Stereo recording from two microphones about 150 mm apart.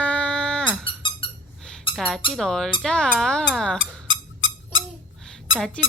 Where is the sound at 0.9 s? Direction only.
35° left (ahead or behind).